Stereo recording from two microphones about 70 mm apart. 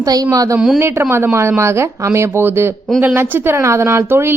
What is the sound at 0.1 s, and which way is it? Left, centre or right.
Speech, right.